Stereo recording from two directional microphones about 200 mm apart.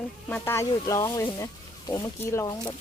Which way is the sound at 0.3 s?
10° left (ahead or behind).